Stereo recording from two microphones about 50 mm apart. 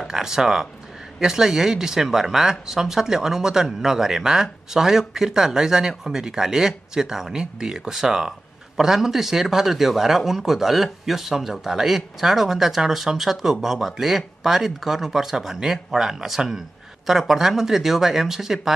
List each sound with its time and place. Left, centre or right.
0.1 s speech: centre